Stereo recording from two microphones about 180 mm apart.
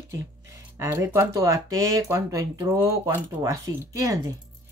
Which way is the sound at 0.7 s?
15° right (ahead or behind).